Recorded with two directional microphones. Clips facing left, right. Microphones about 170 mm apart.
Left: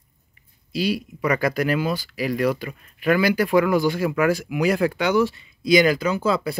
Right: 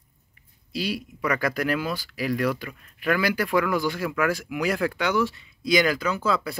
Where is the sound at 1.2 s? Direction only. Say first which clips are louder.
Left 4 dB; 20° left (ahead or behind).